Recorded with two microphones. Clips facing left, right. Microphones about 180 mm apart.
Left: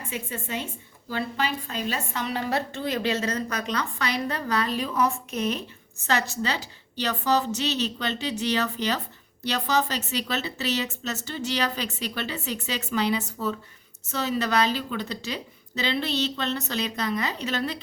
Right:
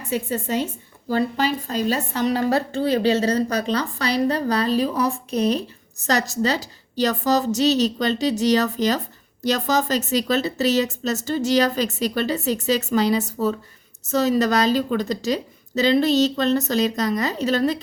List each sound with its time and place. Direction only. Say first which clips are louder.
0.1 s a woman's voice: right 10 dB; 40° right (ahead or behind)